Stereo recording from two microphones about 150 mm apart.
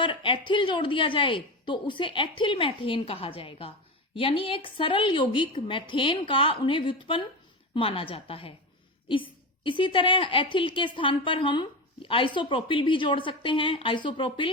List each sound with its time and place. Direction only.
0.0 s a woman's voice: 35° left (ahead or behind)